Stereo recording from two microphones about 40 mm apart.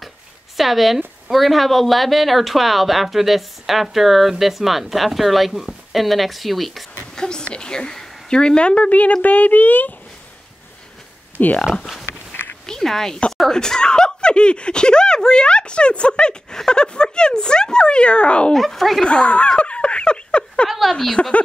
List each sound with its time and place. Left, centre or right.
0.6 s speech: centre
7.2 s speech: centre; by 9.9 s left
11.3 s speech: left
11.8 s speech: centre; by 18.5 s left
18.5 s speech: centre
19.0 s speech: left
19.6 s a sound: left
20.6 s speech: centre
21.2 s speech: left